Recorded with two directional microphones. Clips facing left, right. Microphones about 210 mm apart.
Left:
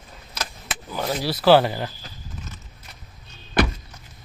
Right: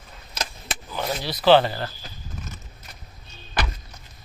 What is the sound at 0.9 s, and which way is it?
Speech, 5° left (ahead or behind).